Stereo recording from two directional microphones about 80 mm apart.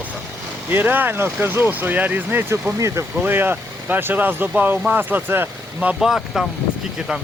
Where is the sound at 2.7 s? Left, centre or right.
Right.